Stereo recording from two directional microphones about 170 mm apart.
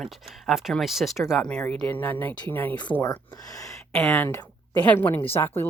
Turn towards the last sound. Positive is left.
turn(degrees=10)  # may be behind; listen again after turning